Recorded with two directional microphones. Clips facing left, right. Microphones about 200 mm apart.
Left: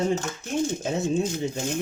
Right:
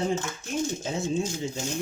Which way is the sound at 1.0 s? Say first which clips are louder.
Left 3 dB; 60° left (ahead or behind).